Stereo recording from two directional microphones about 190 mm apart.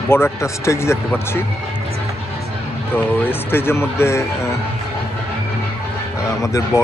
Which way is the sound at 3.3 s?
10° left (ahead or behind).